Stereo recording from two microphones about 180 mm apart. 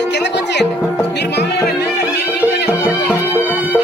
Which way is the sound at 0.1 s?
70° left (ahead or behind).